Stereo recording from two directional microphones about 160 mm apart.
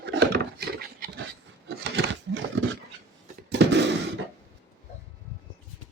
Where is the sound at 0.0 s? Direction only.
90° right; by 1.2 s 70° right (ahead or behind).